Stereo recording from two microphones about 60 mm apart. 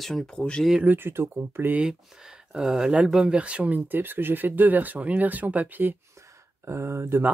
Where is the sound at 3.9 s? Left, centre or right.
Right.